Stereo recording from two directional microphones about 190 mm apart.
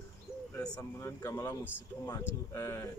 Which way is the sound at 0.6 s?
15° left (ahead or behind).